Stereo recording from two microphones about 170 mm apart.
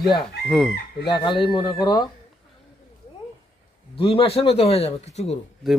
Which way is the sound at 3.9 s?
30° left (ahead or behind).